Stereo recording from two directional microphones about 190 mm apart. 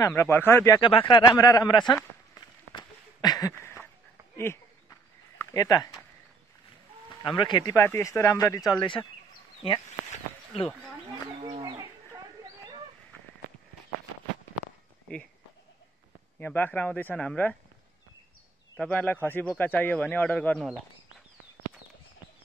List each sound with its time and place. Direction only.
0.0 s speech: 15° left (ahead or behind)
0.7 s speech: 25° left (ahead or behind)
2.0 s a sound: 20° left (ahead or behind)
5.4 s speech: 20° left (ahead or behind)
7.1 s speech: 25° left (ahead or behind)
9.8 s a sound: 35° left (ahead or behind)
11.5 s bird: 25° right (ahead or behind)
16.3 s speech: 10° left (ahead or behind)
18.8 s speech: 10° left (ahead or behind)